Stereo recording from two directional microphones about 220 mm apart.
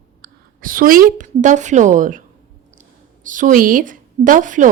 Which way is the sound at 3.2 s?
35° right (ahead or behind).